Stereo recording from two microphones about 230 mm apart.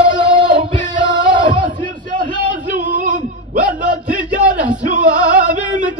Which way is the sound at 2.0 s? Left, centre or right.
Right.